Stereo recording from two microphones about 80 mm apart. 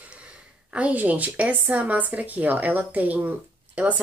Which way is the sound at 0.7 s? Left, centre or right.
Centre.